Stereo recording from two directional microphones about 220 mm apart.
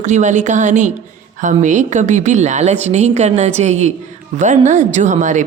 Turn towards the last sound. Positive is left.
turn(degrees=-35)  # may be behind; listen again after turning